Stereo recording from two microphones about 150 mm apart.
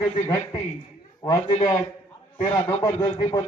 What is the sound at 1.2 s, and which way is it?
A man's voice, 30° left (ahead or behind).